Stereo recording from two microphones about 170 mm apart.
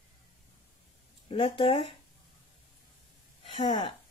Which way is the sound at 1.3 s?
35° left (ahead or behind).